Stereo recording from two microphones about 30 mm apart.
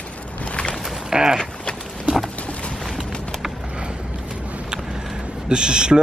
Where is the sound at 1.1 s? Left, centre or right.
Right.